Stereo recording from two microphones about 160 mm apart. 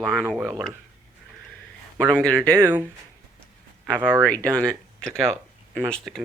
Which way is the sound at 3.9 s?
10° right (ahead or behind).